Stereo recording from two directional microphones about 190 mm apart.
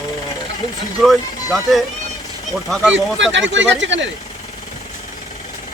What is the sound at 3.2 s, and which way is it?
Speech, 70° right (ahead or behind).